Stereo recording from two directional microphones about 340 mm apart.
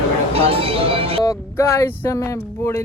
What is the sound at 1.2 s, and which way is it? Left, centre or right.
Speech, centre.